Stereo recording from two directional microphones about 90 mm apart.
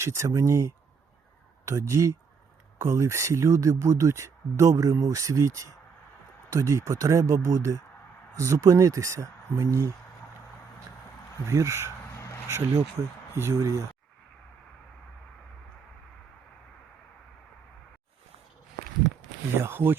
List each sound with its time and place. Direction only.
0.0 s speech: 35° right (ahead or behind)
11.4 s speech: 35° right (ahead or behind)
19.5 s speech: 25° right (ahead or behind)